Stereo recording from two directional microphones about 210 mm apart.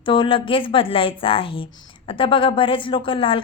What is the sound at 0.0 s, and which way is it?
Speech, 25° left (ahead or behind).